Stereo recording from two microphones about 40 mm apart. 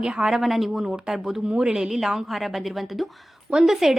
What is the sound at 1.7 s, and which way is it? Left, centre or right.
Speech, centre.